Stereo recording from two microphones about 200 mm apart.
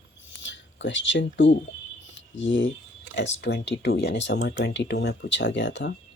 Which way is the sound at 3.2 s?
65° left (ahead or behind).